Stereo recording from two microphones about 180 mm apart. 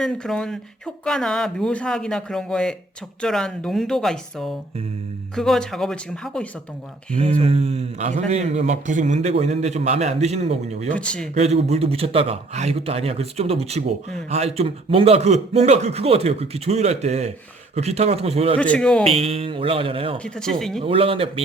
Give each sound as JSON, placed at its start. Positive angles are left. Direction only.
{"t": 0.0, "sound": "a man's voice", "side_deg": 5}
{"t": 7.2, "sound": "a man's voice", "side_deg": -35}
{"t": 10.9, "sound": "speech", "side_deg": 5}
{"t": 11.3, "sound": "a man's voice", "side_deg": -35}
{"t": 18.5, "sound": "a man's voice", "side_deg": 5}
{"t": 19.0, "sound": "a man's voice", "side_deg": -35}
{"t": 20.1, "sound": "a man's voice", "side_deg": 5}
{"t": 20.8, "sound": "a man's voice", "side_deg": -30}